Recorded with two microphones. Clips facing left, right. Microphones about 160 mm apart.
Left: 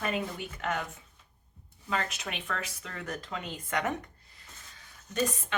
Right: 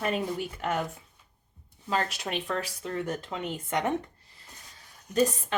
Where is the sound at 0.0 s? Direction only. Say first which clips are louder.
Right 4 dB; 30° right (ahead or behind).